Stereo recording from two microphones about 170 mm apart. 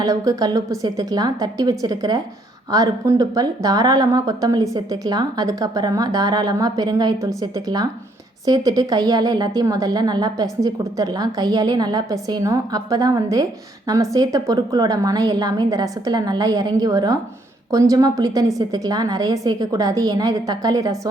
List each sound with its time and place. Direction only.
0.0 s a woman's voice: 20° right (ahead or behind)